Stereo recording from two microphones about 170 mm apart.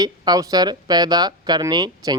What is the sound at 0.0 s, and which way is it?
A man's voice, 25° right (ahead or behind).